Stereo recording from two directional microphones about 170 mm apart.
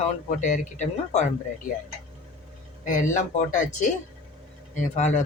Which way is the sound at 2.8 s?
50° left (ahead or behind).